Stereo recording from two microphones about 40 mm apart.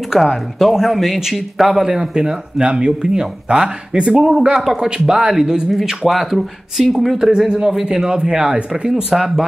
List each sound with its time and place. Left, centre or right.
0.2 s speech: centre
1.9 s a man's voice: centre
5.7 s a man's voice: centre; by 9.0 s right
9.2 s speech: centre